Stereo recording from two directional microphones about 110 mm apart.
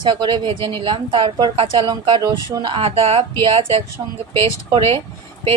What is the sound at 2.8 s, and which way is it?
Speech, 65° right (ahead or behind).